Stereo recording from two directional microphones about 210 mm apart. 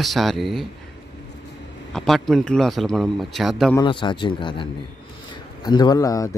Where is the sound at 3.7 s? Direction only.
25° left (ahead or behind).